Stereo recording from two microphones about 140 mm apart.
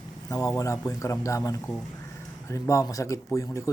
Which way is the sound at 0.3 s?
25° left (ahead or behind).